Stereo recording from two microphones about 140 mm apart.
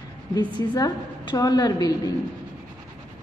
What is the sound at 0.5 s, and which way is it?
A woman's voice, 30° left (ahead or behind).